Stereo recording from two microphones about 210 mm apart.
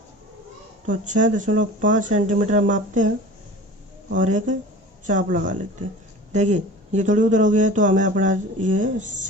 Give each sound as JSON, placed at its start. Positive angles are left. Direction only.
{"t": 0.9, "sound": "speech", "side_deg": -35}
{"t": 4.1, "sound": "speech", "side_deg": -35}